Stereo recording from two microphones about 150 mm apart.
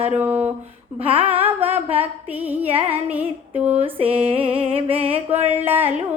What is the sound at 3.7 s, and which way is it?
Mantra, 40° right (ahead or behind).